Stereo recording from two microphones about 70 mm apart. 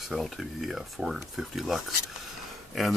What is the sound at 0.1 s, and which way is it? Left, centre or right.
Speech, centre.